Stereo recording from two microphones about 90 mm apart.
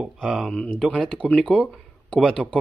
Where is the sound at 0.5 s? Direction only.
10° left (ahead or behind).